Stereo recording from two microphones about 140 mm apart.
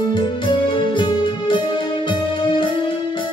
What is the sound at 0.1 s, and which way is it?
Music, 30° left (ahead or behind).